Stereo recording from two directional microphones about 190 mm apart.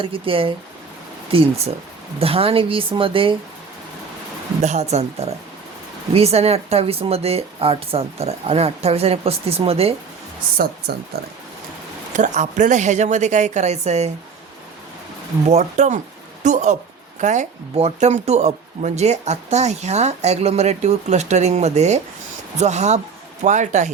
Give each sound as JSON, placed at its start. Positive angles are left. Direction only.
{"t": 0.0, "sound": "a woman's voice", "side_deg": -30}
{"t": 4.6, "sound": "speech", "side_deg": -35}
{"t": 12.1, "sound": "speech", "side_deg": -40}
{"t": 15.4, "sound": "speech", "side_deg": -35}